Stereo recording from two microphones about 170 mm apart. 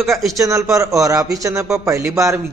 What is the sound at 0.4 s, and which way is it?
A man's voice, 20° right (ahead or behind).